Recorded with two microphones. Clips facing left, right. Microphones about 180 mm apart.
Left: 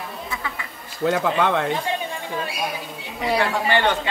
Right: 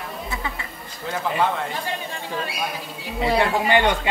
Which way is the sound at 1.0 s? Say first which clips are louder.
Left 4 dB; 90° left.